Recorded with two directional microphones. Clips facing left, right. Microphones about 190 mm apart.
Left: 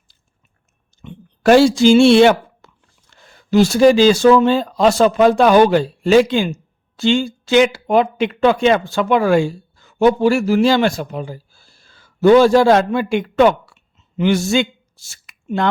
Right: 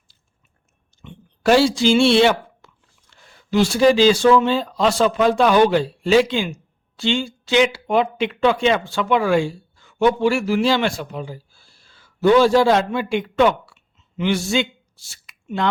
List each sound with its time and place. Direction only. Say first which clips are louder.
1.0 s speech: left 4 dB; 50° left (ahead or behind)
2.6 s biting: left 2 dB; 45° left (ahead or behind)
3.1 s speech: left 5 dB; 40° left (ahead or behind)